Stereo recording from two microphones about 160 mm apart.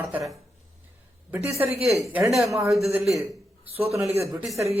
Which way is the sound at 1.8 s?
40° right (ahead or behind).